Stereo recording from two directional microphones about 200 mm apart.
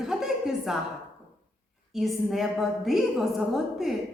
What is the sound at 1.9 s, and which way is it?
A woman's voice, centre (ahead or behind).